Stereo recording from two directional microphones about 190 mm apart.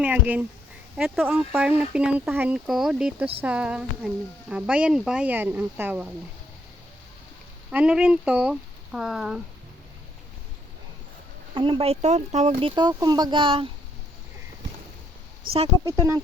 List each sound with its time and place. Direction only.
0.0 s speech: 10° right (ahead or behind)
7.7 s speech: 5° right (ahead or behind)
11.5 s speech: 25° right (ahead or behind)